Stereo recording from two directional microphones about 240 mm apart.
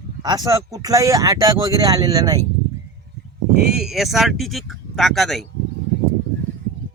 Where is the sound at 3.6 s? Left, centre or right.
Centre.